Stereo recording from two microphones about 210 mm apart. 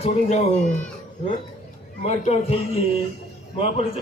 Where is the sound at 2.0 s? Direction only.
30° left (ahead or behind).